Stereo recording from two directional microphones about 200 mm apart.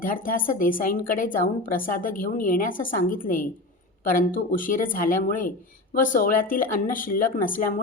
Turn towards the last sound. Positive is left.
turn(degrees=45)  # may be behind; listen again after turning